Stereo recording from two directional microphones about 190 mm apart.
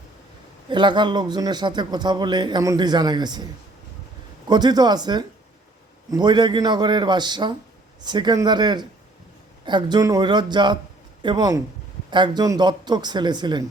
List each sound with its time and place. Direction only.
0.7 s a man's voice: 25° right (ahead or behind)
4.4 s a man's voice: 20° right (ahead or behind)